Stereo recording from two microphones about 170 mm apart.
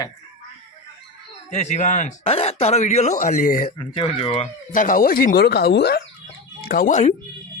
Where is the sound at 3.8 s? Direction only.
35° left (ahead or behind).